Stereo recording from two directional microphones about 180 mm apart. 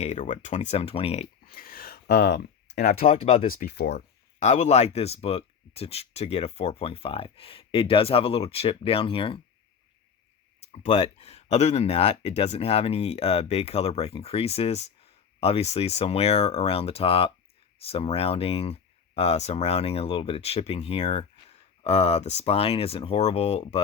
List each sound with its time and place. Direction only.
0.0 s speech: 40° left (ahead or behind)
1.5 s a sound: 55° left (ahead or behind)
3.0 s speech: 35° left (ahead or behind)
3.5 s speech: 60° left (ahead or behind)
4.4 s speech: 40° left (ahead or behind)
10.7 s speech: 40° left (ahead or behind)